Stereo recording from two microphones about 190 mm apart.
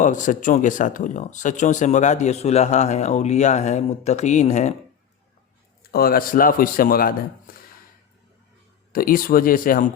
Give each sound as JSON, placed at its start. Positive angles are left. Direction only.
{"t": 0.0, "sound": "speech", "side_deg": 40}
{"t": 5.8, "sound": "speech", "side_deg": 55}
{"t": 8.9, "sound": "speech", "side_deg": 50}